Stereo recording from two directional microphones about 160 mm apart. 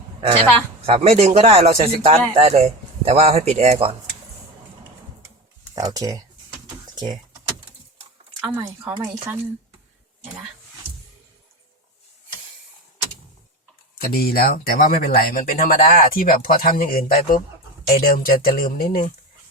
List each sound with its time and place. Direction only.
0.9 s speech: 40° right (ahead or behind)
5.7 s a sound: 20° right (ahead or behind)
8.5 s speech: 10° right (ahead or behind)
14.0 s speech: 70° left (ahead or behind)